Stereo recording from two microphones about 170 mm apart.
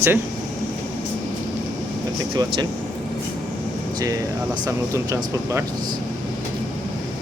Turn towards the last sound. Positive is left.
turn(degrees=-15)  # may be behind; listen again after turning